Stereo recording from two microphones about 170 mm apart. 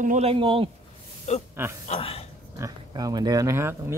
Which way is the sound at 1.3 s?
45° left (ahead or behind).